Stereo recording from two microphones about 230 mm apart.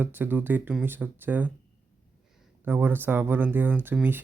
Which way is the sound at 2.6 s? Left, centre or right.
Centre.